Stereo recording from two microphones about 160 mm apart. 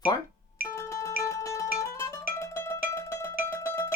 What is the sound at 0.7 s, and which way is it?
Music, 20° left (ahead or behind).